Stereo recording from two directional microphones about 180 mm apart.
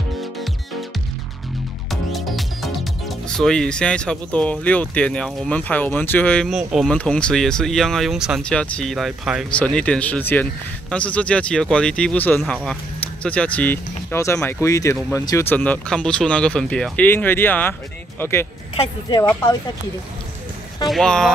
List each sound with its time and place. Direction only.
1.9 s speech: centre (ahead or behind)
18.8 s speech: 25° left (ahead or behind)
20.8 s speech: centre (ahead or behind)